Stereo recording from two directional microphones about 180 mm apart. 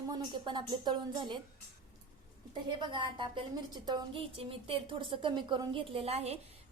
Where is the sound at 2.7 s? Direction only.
25° right (ahead or behind).